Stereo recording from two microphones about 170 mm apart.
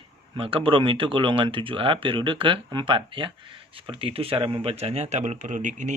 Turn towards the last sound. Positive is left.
turn(degrees=-50)  # may be behind; listen again after turning